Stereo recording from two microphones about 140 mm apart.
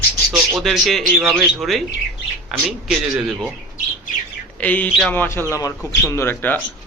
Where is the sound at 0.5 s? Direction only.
Centre (ahead or behind).